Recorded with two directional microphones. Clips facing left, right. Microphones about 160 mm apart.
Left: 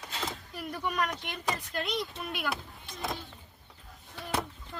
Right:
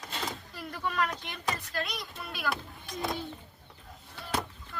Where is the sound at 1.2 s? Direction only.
20° left (ahead or behind).